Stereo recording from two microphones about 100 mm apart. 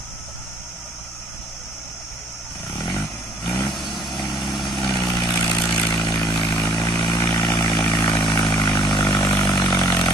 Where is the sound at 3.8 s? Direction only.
Centre (ahead or behind).